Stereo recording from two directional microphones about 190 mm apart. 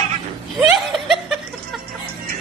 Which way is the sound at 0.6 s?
Centre (ahead or behind).